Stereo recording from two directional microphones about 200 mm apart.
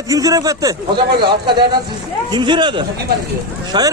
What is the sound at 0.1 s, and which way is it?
Speech, 20° right (ahead or behind).